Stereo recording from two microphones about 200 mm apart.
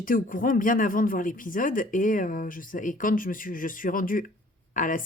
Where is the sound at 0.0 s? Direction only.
45° left (ahead or behind).